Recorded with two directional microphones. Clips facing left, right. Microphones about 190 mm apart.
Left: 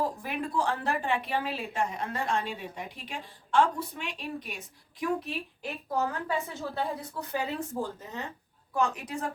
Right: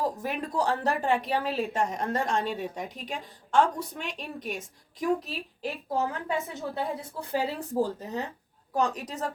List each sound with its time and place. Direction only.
0.0 s a woman's voice: 40° right (ahead or behind)
5.6 s a woman's voice: 25° right (ahead or behind)